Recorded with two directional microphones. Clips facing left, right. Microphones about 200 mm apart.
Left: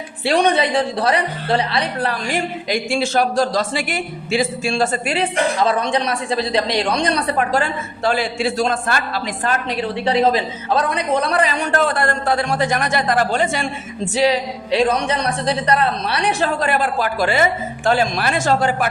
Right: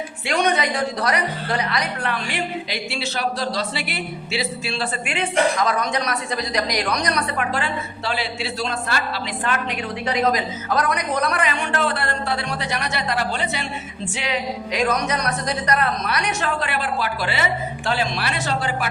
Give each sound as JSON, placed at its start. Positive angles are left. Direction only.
{"t": 0.3, "sound": "a woman's voice", "side_deg": 30}